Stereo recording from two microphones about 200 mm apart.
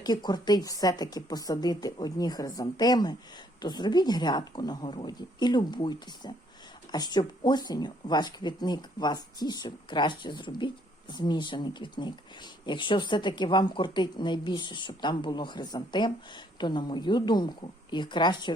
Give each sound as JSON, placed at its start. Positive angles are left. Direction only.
{"t": 0.0, "sound": "speech", "side_deg": 20}